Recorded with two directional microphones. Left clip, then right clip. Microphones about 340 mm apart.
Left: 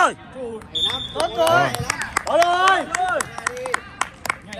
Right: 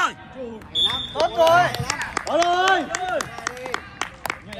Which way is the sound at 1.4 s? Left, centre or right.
Right.